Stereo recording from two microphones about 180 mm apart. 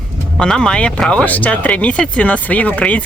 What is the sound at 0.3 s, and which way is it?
Speech, 5° left (ahead or behind).